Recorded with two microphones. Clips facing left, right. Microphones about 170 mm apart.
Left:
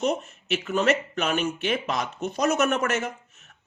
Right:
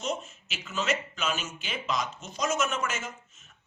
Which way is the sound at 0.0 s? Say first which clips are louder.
Left 7 dB; 60° left (ahead or behind).